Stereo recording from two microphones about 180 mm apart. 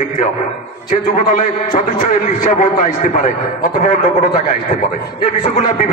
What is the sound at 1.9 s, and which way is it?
A man's voice, 45° left (ahead or behind).